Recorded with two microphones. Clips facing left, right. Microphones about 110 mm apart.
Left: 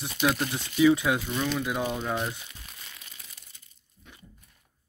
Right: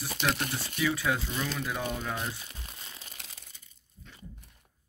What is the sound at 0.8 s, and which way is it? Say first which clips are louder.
Speech: left 8 dB; 15° left (ahead or behind).